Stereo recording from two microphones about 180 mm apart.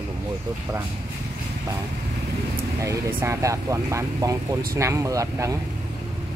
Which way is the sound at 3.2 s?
15° right (ahead or behind).